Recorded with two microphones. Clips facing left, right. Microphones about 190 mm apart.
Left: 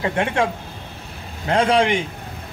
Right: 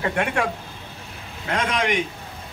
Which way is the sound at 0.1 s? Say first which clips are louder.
Left 3 dB; 25° left (ahead or behind).